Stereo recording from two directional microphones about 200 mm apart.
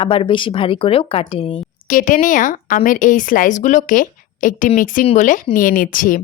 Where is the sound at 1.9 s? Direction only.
40° left (ahead or behind).